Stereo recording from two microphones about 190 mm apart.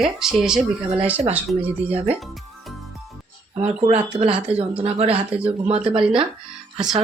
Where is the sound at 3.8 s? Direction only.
30° right (ahead or behind).